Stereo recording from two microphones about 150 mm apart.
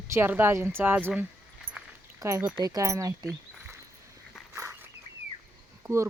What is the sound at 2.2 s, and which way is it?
Speech, 20° right (ahead or behind).